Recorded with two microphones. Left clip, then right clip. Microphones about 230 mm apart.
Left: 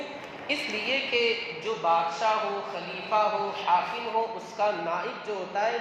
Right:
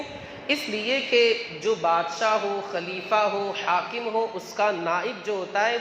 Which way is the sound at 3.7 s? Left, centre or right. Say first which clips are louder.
Left 1 dB; right.